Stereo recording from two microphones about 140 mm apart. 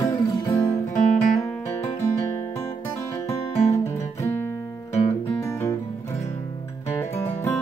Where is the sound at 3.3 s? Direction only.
20° left (ahead or behind).